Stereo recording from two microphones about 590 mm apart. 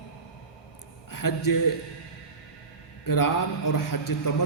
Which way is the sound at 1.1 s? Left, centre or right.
Left.